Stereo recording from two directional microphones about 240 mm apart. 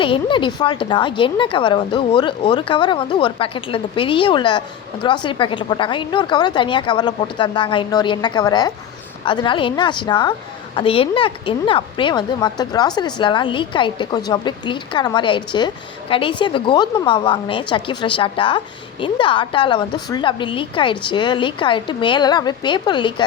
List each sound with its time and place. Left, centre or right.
0.0 s a woman's voice: left